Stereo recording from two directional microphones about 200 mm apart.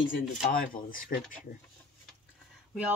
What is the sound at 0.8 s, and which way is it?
Speech, 45° left (ahead or behind).